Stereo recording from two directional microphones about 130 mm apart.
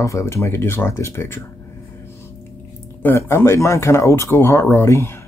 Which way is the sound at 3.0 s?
20° left (ahead or behind).